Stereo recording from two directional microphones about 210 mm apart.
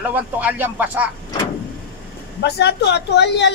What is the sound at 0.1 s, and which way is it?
Speech, 10° right (ahead or behind).